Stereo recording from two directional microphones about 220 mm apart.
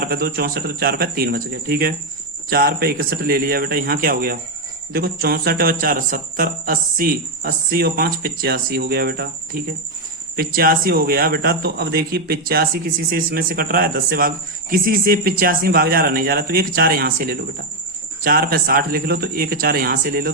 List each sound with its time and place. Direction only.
0.0 s speech: 45° right (ahead or behind)
10.3 s a man's voice: 40° right (ahead or behind)